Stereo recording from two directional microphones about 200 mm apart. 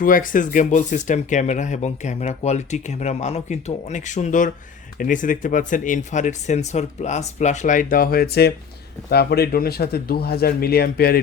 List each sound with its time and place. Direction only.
0.0 s speech: 45° left (ahead or behind)